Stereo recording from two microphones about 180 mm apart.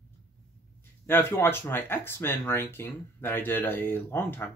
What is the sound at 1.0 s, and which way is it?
Speech, 15° left (ahead or behind).